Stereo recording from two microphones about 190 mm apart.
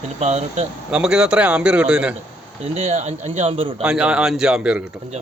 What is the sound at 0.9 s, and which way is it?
Speech, 5° right (ahead or behind).